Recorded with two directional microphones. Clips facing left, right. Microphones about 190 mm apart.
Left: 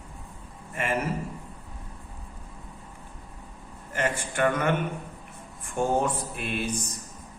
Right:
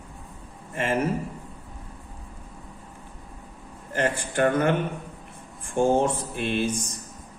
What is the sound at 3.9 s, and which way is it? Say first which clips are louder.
Speech: right 3 dB; 35° right (ahead or behind).